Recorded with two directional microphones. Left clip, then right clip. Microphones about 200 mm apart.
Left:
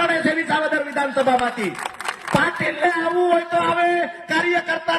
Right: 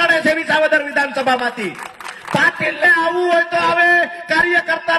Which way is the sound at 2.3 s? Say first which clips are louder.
Right 5 dB; 10° right (ahead or behind).